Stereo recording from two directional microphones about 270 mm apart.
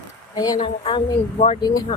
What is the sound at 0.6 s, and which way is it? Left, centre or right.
Speech, centre.